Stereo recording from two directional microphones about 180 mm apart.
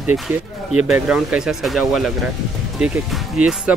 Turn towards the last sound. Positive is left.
turn(degrees=-5)  # may be behind; listen again after turning